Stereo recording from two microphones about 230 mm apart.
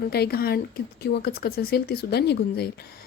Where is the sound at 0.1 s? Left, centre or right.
Left.